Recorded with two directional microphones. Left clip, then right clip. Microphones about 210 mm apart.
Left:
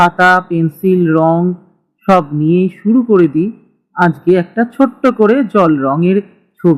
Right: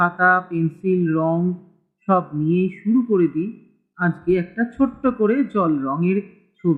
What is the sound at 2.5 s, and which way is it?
Speech, 15° left (ahead or behind).